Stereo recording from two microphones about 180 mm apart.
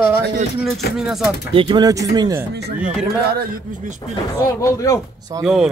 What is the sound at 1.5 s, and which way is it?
Speech, 25° right (ahead or behind).